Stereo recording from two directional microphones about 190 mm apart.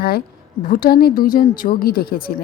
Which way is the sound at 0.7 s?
45° left (ahead or behind).